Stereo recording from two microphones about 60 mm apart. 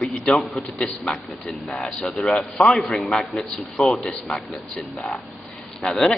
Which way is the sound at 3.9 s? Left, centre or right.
Centre.